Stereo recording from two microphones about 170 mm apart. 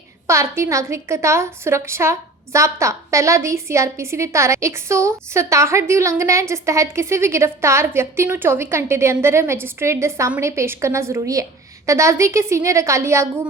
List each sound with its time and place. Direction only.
0.3 s a woman's voice: 15° right (ahead or behind)